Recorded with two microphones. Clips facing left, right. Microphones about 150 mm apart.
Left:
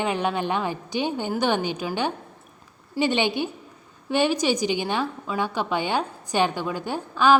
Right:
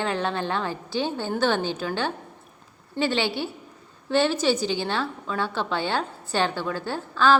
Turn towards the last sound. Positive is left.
turn(degrees=15)  # may be behind; listen again after turning